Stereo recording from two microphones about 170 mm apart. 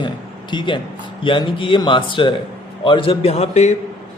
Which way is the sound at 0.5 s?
30° left (ahead or behind).